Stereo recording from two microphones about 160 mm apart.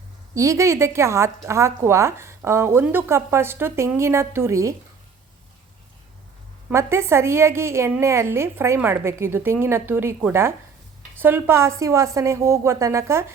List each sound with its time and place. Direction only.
0.3 s a woman's voice: 20° right (ahead or behind)
6.7 s a woman's voice: 15° right (ahead or behind)